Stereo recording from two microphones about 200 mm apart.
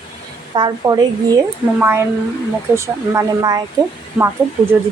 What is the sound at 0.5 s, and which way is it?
Speech, 20° right (ahead or behind).